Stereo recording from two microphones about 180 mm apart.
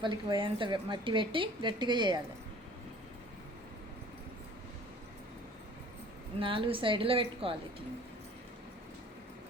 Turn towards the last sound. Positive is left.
turn(degrees=-30)  # may be behind; listen again after turning